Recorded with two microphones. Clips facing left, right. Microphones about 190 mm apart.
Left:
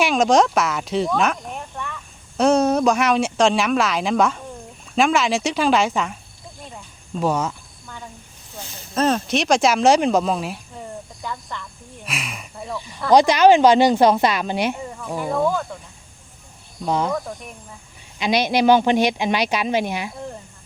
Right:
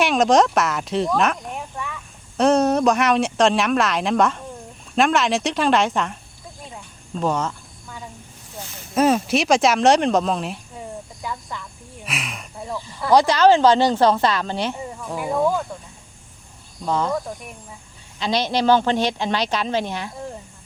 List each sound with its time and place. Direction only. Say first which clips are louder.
0.0 s speech: even; centre (ahead or behind)
7.2 s speech: left 1 dB; 5° left (ahead or behind)
9.0 s speech: right 2 dB; 10° right (ahead or behind)
12.0 s a sound: even; centre (ahead or behind)
13.1 s speech: left 2 dB; 15° left (ahead or behind)
15.1 s speech: even; 10° right (ahead or behind)
16.8 s speech: left 1 dB; 15° left (ahead or behind)
18.2 s speech: left 3 dB; 15° left (ahead or behind)